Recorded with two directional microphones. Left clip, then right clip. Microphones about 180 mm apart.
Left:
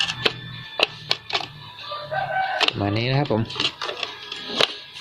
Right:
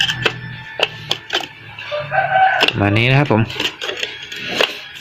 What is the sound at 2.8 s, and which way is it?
Speech, 15° right (ahead or behind).